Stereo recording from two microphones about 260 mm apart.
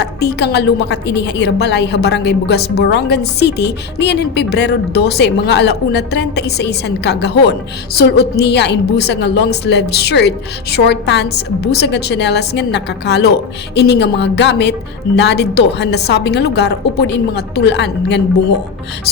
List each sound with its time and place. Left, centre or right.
0.0 s a woman's voice: left